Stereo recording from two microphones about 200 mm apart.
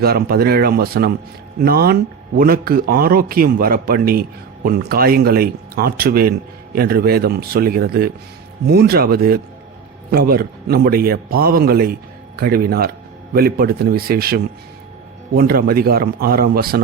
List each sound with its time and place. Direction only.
0.0 s a man's voice: 50° right (ahead or behind)